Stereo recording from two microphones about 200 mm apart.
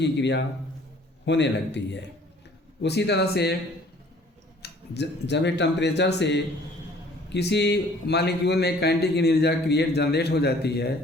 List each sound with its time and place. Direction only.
0.0 s a man's voice: 60° left (ahead or behind)
4.6 s a man's voice: 60° left (ahead or behind)